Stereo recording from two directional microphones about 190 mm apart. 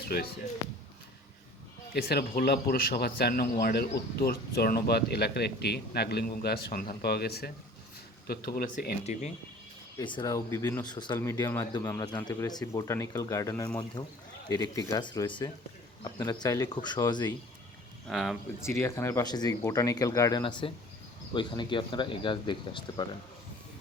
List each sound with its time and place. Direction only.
0.0 s speech: 55° left (ahead or behind)
1.9 s speech: 55° left (ahead or behind)
10.0 s speech: 25° left (ahead or behind)
18.1 s speech: centre (ahead or behind)
18.6 s speech: 15° left (ahead or behind)